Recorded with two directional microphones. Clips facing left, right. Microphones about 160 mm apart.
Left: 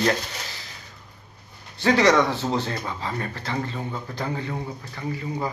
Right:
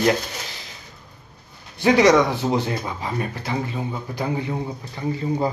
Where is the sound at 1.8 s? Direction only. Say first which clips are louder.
Right 3 dB; 15° right (ahead or behind).